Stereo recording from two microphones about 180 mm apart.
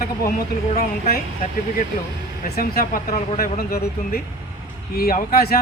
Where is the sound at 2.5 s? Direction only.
55° left (ahead or behind).